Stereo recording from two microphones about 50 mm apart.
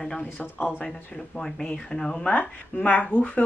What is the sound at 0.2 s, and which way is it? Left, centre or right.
Speech, left.